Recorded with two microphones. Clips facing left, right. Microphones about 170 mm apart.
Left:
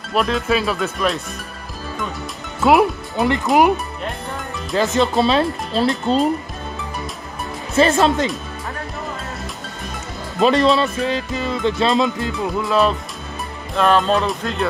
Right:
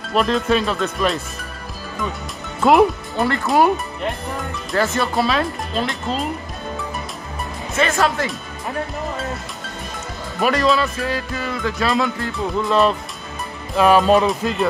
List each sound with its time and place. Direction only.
0.1 s speech: centre (ahead or behind)
2.6 s speech: centre (ahead or behind)
3.2 s speech: 20° left (ahead or behind)
4.7 s speech: 20° left (ahead or behind); by 6.2 s 35° left (ahead or behind)
7.7 s speech: 30° left (ahead or behind)
10.4 s speech: 25° left (ahead or behind)
12.6 s speech: centre (ahead or behind)